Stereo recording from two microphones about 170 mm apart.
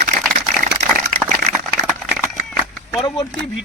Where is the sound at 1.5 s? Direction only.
10° right (ahead or behind).